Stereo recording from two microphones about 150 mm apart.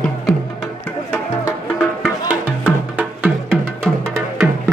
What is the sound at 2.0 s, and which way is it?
Music, 10° right (ahead or behind).